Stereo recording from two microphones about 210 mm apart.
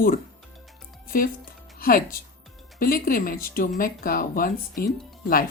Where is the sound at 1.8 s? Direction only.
45° left (ahead or behind).